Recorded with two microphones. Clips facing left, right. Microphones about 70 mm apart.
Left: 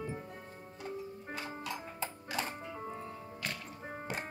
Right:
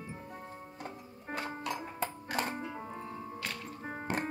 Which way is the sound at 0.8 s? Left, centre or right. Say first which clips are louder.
Left 4 dB; right.